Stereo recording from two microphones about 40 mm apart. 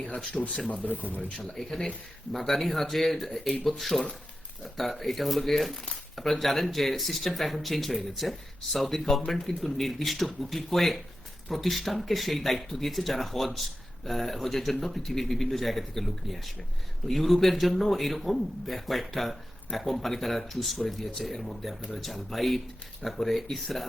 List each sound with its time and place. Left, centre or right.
0.4 s speech: centre
0.7 s speech: left
1.5 s speech: centre